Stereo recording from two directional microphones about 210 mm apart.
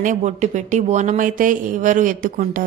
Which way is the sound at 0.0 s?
35° right (ahead or behind).